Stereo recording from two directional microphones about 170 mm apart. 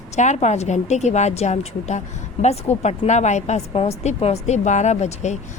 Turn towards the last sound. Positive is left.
turn(degrees=40)  # may be behind; listen again after turning